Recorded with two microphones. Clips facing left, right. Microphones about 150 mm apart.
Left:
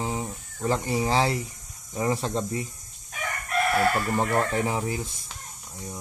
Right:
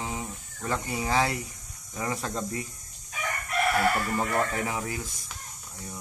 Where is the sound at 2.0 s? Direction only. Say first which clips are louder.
Left 5 dB; 30° left (ahead or behind).